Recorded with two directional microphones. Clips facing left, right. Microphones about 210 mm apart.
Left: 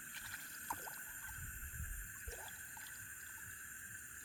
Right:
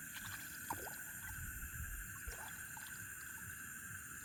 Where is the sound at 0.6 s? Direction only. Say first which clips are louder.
Right 2 dB; 10° right (ahead or behind).